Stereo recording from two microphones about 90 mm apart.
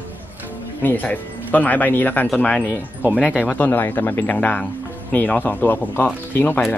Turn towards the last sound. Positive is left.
turn(degrees=20)  # may be behind; listen again after turning